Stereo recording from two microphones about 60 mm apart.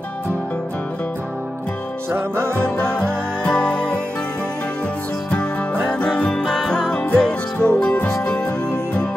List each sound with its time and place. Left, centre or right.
2.1 s music: right
3.4 s music: centre
5.9 s music: centre